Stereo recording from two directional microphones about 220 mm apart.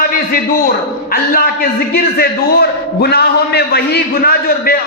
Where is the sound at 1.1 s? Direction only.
40° left (ahead or behind).